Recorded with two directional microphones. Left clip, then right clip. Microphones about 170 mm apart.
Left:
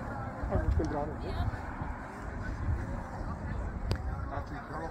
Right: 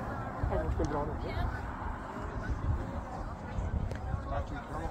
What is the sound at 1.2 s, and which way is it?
Speech, 10° right (ahead or behind).